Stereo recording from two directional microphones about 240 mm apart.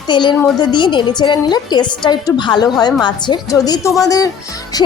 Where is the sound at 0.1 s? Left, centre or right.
Centre.